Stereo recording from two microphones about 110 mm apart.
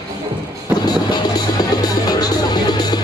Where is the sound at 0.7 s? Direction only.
40° left (ahead or behind).